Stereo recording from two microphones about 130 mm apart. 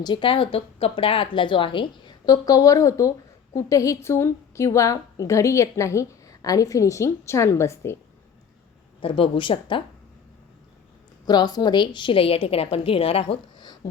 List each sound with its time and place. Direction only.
0.0 s a woman's voice: 40° left (ahead or behind); by 7.9 s 20° left (ahead or behind)
9.0 s a woman's voice: 45° left (ahead or behind)
11.3 s a woman's voice: 30° left (ahead or behind)